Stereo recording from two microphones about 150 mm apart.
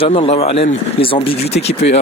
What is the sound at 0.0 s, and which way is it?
Speech, 40° left (ahead or behind).